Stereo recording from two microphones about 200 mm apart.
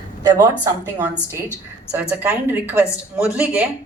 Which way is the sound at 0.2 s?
20° right (ahead or behind).